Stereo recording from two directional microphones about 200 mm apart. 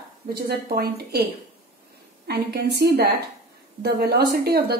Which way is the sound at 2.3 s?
55° right (ahead or behind).